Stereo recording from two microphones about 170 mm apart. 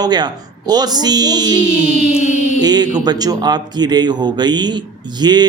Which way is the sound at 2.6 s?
25° right (ahead or behind).